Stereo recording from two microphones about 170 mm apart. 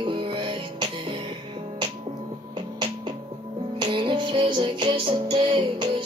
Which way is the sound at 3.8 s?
30° right (ahead or behind).